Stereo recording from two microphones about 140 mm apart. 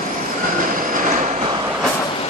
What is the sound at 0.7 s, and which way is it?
Train, 70° right (ahead or behind).